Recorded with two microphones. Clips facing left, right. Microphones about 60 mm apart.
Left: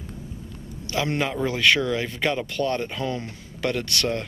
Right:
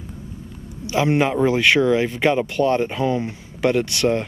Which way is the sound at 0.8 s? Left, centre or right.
Centre.